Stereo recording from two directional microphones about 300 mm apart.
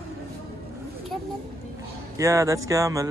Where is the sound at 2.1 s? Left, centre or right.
Centre.